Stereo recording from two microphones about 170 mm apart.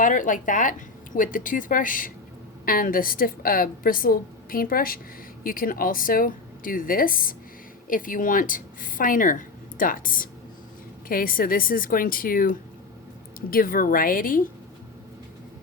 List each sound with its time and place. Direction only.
0.0 s a woman's voice: 50° left (ahead or behind)